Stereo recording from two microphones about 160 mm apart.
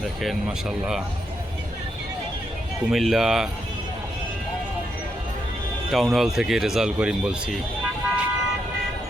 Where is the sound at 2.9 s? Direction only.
Centre (ahead or behind).